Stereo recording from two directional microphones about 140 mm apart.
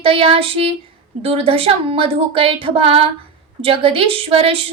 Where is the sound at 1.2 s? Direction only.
40° right (ahead or behind).